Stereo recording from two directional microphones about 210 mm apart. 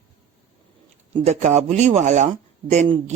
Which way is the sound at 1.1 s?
30° right (ahead or behind).